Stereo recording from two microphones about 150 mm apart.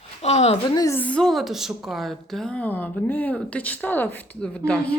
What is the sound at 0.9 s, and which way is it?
A woman's voice, 10° left (ahead or behind).